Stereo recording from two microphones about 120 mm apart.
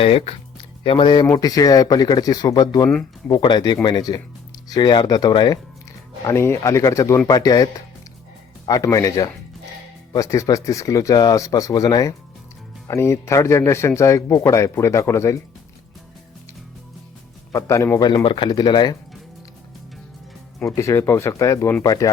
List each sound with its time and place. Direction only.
0.0 s speech: 55° left (ahead or behind)
0.9 s speech: 40° left (ahead or behind)
1.3 s speech: 30° left (ahead or behind)
6.2 s speech: 20° left (ahead or behind)
17.5 s speech: 25° left (ahead or behind)
18.0 s speech: 45° left (ahead or behind)
20.6 s speech: 25° left (ahead or behind)